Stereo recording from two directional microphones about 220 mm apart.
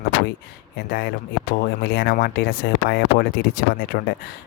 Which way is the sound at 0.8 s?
45° left (ahead or behind).